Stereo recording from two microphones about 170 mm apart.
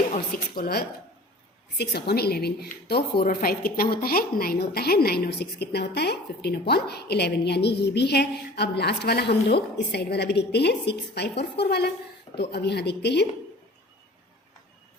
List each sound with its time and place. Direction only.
0.5 s a woman's voice: 65° left (ahead or behind)